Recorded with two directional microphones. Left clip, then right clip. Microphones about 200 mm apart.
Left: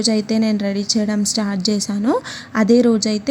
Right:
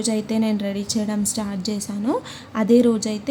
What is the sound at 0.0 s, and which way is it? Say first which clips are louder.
A woman's voice: left 5 dB; 20° left (ahead or behind).